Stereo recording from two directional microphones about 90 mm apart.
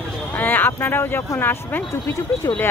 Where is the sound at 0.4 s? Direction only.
20° left (ahead or behind).